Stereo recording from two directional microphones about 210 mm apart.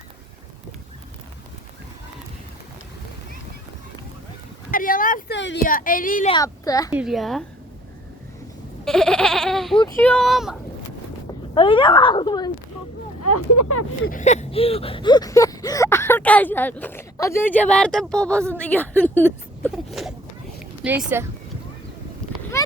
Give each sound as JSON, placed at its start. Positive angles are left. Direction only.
{"t": 4.7, "sound": "a woman's voice", "side_deg": 40}
{"t": 6.3, "sound": "a sound", "side_deg": 15}
{"t": 6.9, "sound": "speech", "side_deg": 0}
{"t": 8.8, "sound": "speech", "side_deg": 0}
{"t": 11.5, "sound": "speech", "side_deg": 25}
{"t": 13.3, "sound": "speech", "side_deg": 90}
{"t": 14.1, "sound": "a sound", "side_deg": 35}
{"t": 18.5, "sound": "speech", "side_deg": 5}
{"t": 19.7, "sound": "a sound", "side_deg": 0}